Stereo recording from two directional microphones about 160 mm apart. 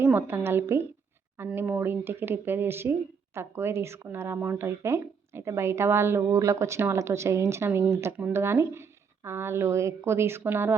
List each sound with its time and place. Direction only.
0.0 s a woman's voice: 15° right (ahead or behind)